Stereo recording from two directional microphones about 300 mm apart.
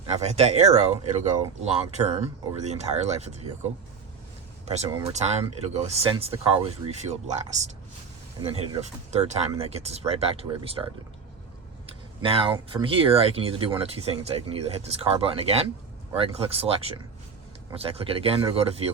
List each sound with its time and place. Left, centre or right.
0.2 s speech: right
4.6 s speech: right
12.2 s speech: centre